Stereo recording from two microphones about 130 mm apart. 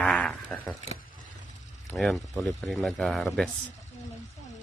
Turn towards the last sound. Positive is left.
turn(degrees=0)  # may be behind; listen again after turning